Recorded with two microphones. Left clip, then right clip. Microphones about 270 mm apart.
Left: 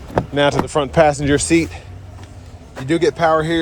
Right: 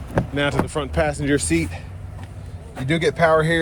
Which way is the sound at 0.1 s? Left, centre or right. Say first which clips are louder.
Left 6 dB; centre.